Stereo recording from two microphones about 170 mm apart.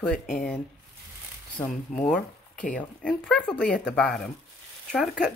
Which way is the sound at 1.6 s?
35° left (ahead or behind).